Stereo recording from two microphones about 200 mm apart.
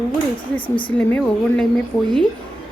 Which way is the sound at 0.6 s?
25° left (ahead or behind).